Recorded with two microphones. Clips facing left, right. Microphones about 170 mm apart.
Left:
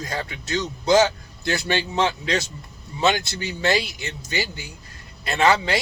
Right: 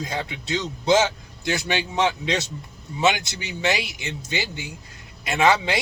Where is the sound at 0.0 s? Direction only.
20° right (ahead or behind).